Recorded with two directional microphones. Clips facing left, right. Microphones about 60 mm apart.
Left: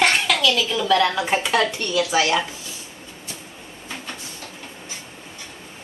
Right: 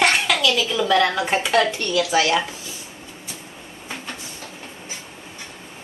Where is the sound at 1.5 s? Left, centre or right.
Centre.